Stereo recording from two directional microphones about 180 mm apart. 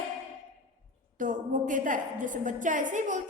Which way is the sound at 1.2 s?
45° right (ahead or behind).